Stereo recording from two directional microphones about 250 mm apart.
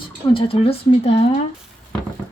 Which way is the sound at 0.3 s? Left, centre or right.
Left.